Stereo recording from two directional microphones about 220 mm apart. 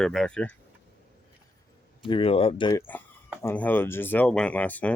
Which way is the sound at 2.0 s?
25° left (ahead or behind).